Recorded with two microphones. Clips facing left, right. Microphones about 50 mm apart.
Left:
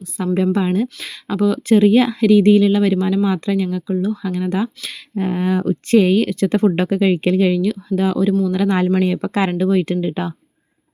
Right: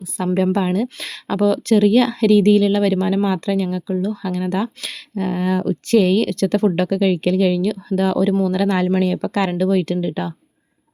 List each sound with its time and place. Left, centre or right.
0.2 s speech: centre
1.6 s speech: left
5.1 s speech: centre